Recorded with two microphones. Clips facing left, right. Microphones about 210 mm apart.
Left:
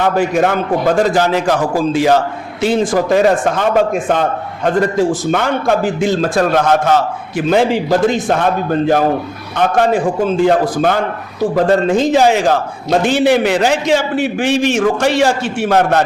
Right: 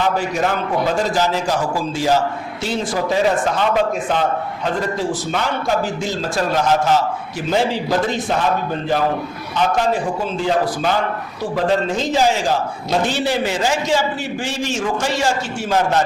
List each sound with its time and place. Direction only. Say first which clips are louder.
0.0 s a man's voice: left 6 dB; 55° left (ahead or behind)
9.6 s a man's voice: left 5 dB; 60° left (ahead or behind)